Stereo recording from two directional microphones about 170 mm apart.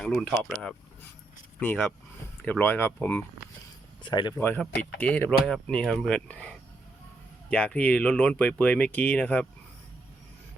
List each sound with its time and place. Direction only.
0.0 s speech: 5° left (ahead or behind)
4.0 s speech: 25° left (ahead or behind)
4.4 s speech: 10° left (ahead or behind)